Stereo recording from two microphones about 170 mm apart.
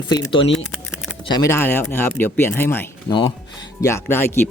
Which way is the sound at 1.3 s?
15° left (ahead or behind).